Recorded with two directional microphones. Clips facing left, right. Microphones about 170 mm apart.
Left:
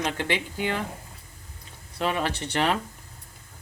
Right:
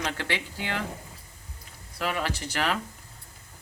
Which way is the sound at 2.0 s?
25° left (ahead or behind).